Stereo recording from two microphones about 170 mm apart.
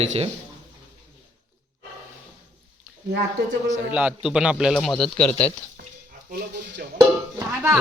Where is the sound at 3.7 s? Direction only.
10° right (ahead or behind).